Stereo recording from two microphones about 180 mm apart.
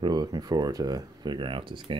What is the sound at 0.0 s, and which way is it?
Speech, 25° right (ahead or behind).